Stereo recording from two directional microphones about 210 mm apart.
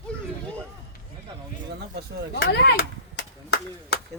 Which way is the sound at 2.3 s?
50° left (ahead or behind).